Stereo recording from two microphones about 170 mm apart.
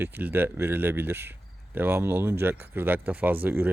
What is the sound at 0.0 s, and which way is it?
Speech, 10° right (ahead or behind).